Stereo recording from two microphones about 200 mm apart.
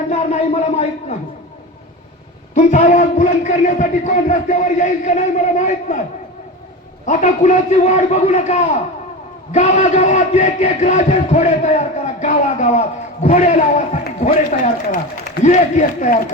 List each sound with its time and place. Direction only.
0.1 s a man's voice: 35° left (ahead or behind)
2.6 s a man's voice: 35° left (ahead or behind)
7.0 s a man's voice: 35° left (ahead or behind)